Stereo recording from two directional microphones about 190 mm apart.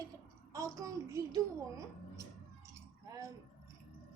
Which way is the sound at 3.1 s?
15° right (ahead or behind).